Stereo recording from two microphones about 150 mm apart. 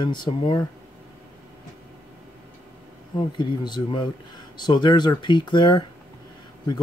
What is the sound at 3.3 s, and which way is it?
Speech, 30° left (ahead or behind).